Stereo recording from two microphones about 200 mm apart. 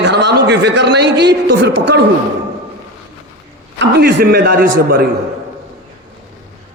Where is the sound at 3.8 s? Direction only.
55° right (ahead or behind).